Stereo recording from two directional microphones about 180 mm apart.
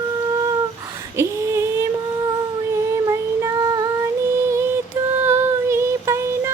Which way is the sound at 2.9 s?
15° right (ahead or behind).